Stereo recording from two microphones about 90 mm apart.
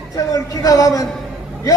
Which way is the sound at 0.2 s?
40° left (ahead or behind).